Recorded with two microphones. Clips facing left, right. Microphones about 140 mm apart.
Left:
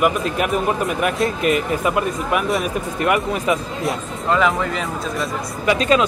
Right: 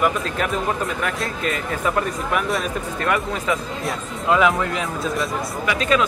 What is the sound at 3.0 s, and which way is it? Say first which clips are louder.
Speech: left 4 dB; 15° left (ahead or behind).